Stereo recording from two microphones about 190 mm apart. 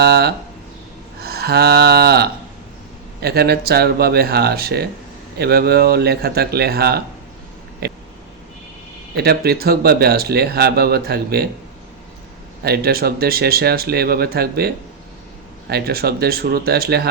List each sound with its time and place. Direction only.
0.0 s speech: 55° right (ahead or behind)
1.2 s a sound: 55° right (ahead or behind)
3.2 s speech: 55° right (ahead or behind)
7.8 s a sound: 55° right (ahead or behind)
9.1 s speech: 55° right (ahead or behind)
12.6 s speech: 55° right (ahead or behind)